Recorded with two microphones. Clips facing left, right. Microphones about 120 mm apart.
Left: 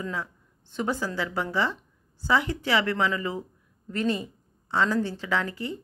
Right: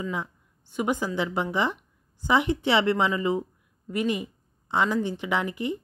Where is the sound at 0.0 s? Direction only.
15° right (ahead or behind).